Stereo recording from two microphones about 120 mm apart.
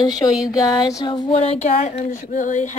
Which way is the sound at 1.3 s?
55° left (ahead or behind).